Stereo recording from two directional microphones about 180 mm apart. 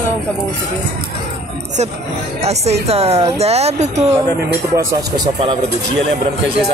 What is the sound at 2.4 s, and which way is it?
A woman's voice, 35° right (ahead or behind).